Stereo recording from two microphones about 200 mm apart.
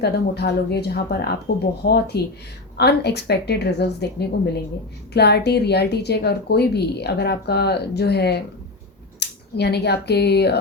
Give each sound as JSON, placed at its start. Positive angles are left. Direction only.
{"t": 0.0, "sound": "a woman's voice", "side_deg": 55}